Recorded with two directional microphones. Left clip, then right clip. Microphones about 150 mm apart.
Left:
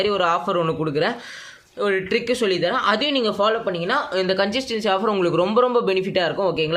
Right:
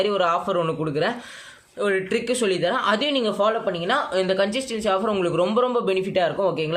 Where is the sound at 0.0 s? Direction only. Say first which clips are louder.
Left 1 dB; 20° left (ahead or behind).